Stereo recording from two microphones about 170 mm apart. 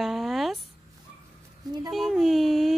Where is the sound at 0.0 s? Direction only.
Centre (ahead or behind).